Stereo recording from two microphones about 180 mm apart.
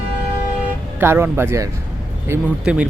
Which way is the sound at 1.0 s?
10° right (ahead or behind).